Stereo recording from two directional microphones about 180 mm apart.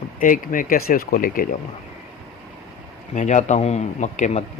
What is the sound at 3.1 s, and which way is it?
Speech, 40° left (ahead or behind).